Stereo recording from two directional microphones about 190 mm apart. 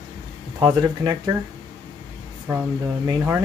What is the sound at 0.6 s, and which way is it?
Speech, 20° right (ahead or behind).